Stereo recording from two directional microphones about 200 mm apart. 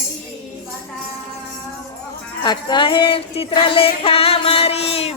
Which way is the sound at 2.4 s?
25° left (ahead or behind).